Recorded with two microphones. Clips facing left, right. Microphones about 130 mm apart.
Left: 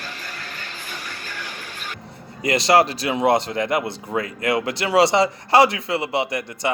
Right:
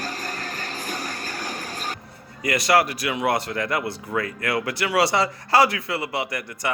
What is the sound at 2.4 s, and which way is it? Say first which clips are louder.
Speech: left 3 dB; 25° left (ahead or behind).